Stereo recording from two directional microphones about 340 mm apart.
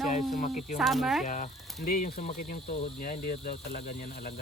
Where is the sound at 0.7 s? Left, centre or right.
Centre.